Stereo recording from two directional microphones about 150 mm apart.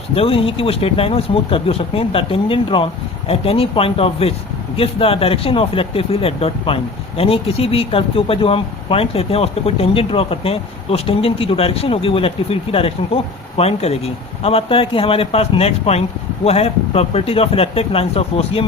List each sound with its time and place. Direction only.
0.1 s speech: 40° left (ahead or behind)